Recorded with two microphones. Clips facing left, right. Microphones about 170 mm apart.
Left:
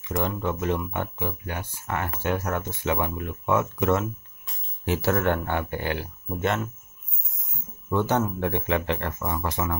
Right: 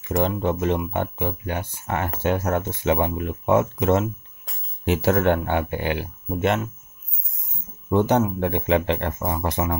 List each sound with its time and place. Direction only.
0.1 s speech: 25° right (ahead or behind)
7.9 s speech: 20° right (ahead or behind)